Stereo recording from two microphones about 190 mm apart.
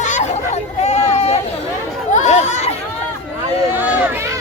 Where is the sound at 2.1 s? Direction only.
40° left (ahead or behind).